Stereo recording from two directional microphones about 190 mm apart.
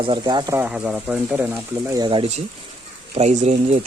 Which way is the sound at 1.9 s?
25° right (ahead or behind).